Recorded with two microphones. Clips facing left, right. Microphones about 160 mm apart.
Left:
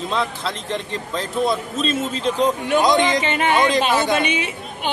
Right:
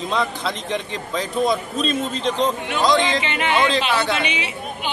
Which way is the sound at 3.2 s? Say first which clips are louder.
Left 2 dB; 45° left (ahead or behind).